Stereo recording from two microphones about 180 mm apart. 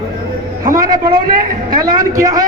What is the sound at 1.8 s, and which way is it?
Speech, 20° right (ahead or behind).